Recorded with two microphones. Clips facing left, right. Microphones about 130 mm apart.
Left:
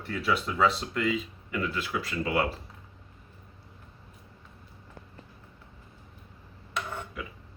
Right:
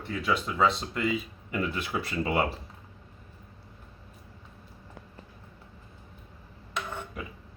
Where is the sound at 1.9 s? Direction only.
30° right (ahead or behind).